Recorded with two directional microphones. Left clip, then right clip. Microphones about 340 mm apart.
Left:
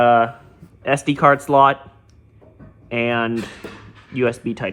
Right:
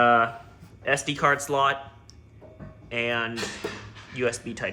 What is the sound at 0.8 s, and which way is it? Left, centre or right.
Speech, centre.